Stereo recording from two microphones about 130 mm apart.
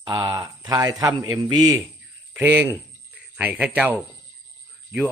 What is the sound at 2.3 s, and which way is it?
Speech, 15° right (ahead or behind).